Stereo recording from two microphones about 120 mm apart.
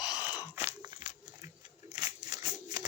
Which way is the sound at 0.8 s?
35° right (ahead or behind).